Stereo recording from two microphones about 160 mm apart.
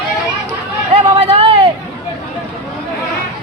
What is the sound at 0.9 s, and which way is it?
Vehicle, 35° right (ahead or behind).